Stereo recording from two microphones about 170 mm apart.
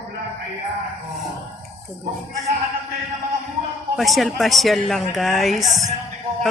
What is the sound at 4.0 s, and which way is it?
A woman's voice, centre (ahead or behind).